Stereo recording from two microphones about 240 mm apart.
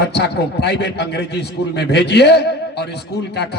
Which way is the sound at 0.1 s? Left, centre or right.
Left.